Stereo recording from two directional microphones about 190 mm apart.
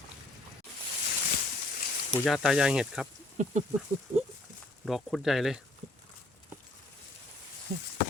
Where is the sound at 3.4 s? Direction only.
40° right (ahead or behind).